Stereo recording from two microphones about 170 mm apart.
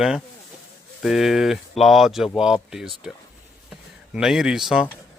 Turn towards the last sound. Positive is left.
turn(degrees=-5)  # may be behind; listen again after turning